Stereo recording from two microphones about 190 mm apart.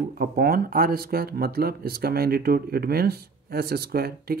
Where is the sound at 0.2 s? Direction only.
50° right (ahead or behind).